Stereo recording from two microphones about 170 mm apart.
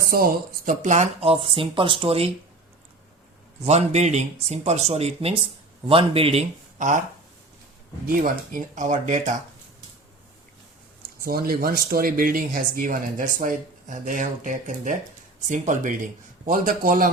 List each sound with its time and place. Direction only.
0.1 s speech: 60° right (ahead or behind); by 2.3 s 35° right (ahead or behind)
3.7 s speech: 40° right (ahead or behind)
6.7 s speech: 45° right (ahead or behind)
8.0 s speech: 55° right (ahead or behind)
11.2 s speech: 60° right (ahead or behind)